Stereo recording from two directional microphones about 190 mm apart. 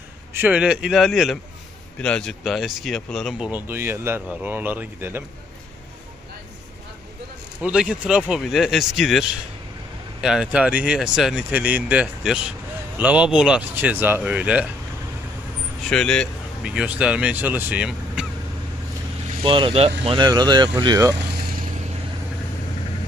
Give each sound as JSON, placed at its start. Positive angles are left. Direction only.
{"t": 0.3, "sound": "speech", "side_deg": -10}
{"t": 7.6, "sound": "speech", "side_deg": -5}
{"t": 10.2, "sound": "speech", "side_deg": -5}
{"t": 15.9, "sound": "speech", "side_deg": 5}
{"t": 19.4, "sound": "speech", "side_deg": -25}